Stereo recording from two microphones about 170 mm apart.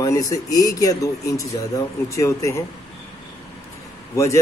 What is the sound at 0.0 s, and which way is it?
A man's voice, 20° left (ahead or behind).